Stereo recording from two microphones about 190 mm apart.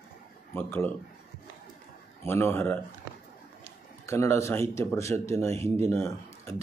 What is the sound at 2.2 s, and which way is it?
Speech, 15° left (ahead or behind).